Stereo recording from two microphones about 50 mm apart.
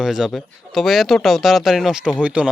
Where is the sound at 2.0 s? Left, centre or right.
Right.